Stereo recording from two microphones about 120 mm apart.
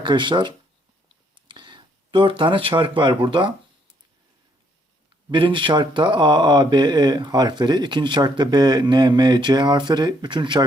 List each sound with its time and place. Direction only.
0.0 s speech: 40° right (ahead or behind)
5.3 s speech: 45° right (ahead or behind)